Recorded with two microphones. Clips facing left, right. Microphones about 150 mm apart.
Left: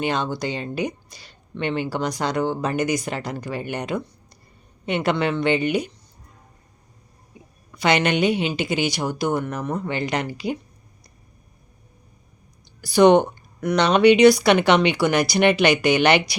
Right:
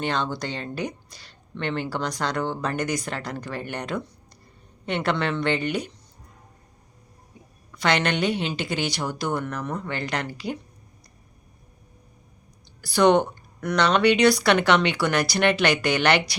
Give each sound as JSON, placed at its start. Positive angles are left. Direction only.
{"t": 0.0, "sound": "speech", "side_deg": 10}
{"t": 7.7, "sound": "speech", "side_deg": 10}
{"t": 12.6, "sound": "a sound", "side_deg": 15}
{"t": 13.7, "sound": "speech", "side_deg": 15}